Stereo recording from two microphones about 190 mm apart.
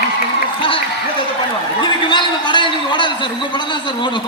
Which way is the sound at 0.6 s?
25° left (ahead or behind).